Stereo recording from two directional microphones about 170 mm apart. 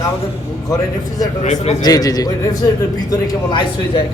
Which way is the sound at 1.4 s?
40° left (ahead or behind).